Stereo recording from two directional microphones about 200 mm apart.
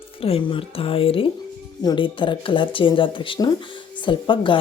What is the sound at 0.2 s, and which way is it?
A woman's voice, 25° left (ahead or behind).